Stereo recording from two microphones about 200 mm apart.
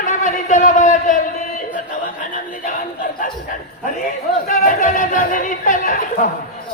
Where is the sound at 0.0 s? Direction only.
40° left (ahead or behind).